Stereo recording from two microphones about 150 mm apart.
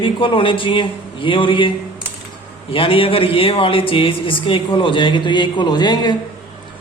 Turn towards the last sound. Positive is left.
turn(degrees=30)  # may be behind; listen again after turning